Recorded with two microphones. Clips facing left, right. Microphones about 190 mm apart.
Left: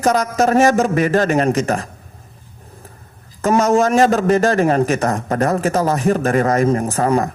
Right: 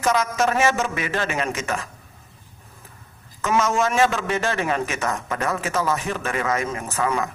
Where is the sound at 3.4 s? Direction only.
40° left (ahead or behind).